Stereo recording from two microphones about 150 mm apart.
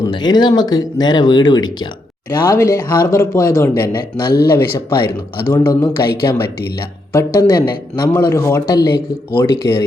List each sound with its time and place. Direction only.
0.1 s speech: 30° left (ahead or behind)
7.1 s speech: 20° left (ahead or behind)